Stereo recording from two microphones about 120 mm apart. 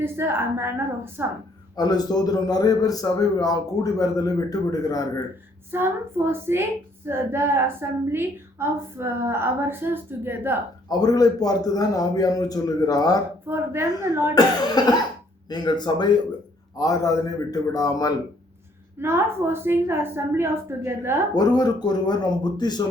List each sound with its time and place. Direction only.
0.0 s a woman's voice: 20° right (ahead or behind)
1.7 s a man's voice: 35° left (ahead or behind)
5.7 s a woman's voice: 20° right (ahead or behind)
10.8 s a man's voice: 30° left (ahead or behind)
13.5 s a woman's voice: 20° right (ahead or behind)
14.3 s a man's voice: 35° left (ahead or behind)
18.9 s a woman's voice: 20° right (ahead or behind)
21.3 s a man's voice: 35° left (ahead or behind)